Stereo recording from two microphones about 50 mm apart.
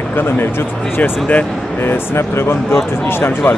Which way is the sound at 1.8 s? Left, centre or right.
Left.